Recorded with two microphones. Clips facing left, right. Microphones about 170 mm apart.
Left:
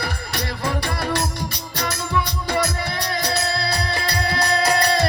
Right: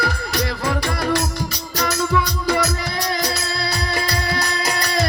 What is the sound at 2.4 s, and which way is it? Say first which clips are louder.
Music: right 2 dB; 30° left (ahead or behind).